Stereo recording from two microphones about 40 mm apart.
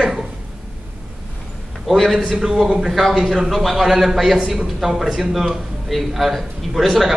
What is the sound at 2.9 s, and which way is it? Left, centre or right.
A man's voice, centre.